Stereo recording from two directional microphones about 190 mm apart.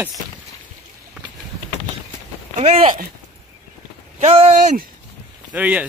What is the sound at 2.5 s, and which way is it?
Speech, 35° right (ahead or behind).